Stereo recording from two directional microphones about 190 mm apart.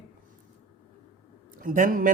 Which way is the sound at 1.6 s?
45° right (ahead or behind).